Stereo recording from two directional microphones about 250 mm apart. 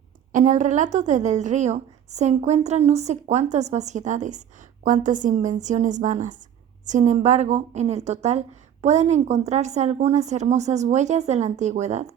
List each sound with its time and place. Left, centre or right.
0.3 s a woman's voice: right